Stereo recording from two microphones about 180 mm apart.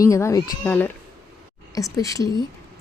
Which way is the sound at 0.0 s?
15° left (ahead or behind).